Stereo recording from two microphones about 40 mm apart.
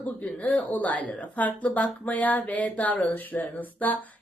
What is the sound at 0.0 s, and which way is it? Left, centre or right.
Speech, left.